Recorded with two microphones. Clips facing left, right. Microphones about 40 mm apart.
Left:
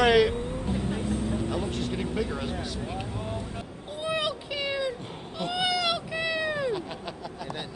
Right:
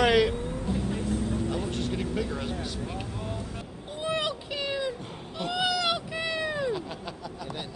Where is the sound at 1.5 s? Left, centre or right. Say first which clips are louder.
Even; centre.